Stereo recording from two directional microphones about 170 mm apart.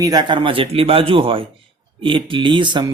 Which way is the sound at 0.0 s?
25° right (ahead or behind).